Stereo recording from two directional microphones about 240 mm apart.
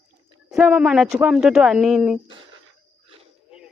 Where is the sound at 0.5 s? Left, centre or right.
Centre.